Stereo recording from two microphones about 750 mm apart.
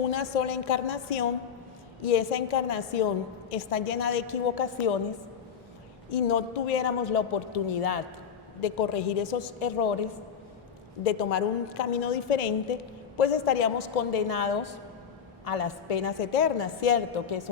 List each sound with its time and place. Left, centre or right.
0.1 s a woman's voice: left
6.1 s a woman's voice: left
11.0 s a woman's voice: left